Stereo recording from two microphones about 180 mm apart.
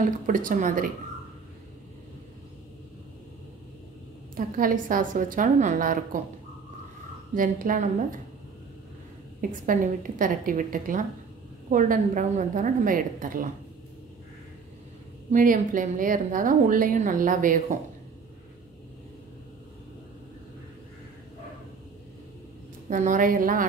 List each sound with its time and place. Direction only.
0.0 s a woman's voice: 45° right (ahead or behind)
4.4 s a woman's voice: 50° right (ahead or behind)
7.3 s a woman's voice: 50° right (ahead or behind)
9.4 s a woman's voice: 50° right (ahead or behind)
15.3 s a woman's voice: 45° right (ahead or behind)
22.8 s a woman's voice: 45° right (ahead or behind)